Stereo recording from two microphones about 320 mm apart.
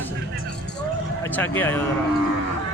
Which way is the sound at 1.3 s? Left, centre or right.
Centre.